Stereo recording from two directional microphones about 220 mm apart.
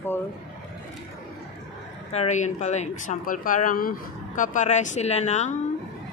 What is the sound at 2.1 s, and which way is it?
Speech, 30° left (ahead or behind).